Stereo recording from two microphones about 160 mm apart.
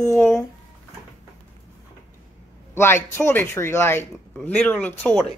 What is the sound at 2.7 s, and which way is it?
Speech, 15° left (ahead or behind).